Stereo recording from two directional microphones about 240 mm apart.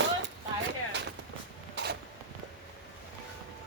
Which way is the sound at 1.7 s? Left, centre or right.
Right.